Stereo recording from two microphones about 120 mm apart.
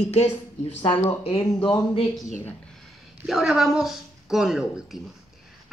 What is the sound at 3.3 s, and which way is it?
Speech, 5° right (ahead or behind).